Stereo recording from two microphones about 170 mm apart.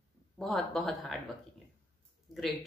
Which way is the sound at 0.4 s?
Centre (ahead or behind).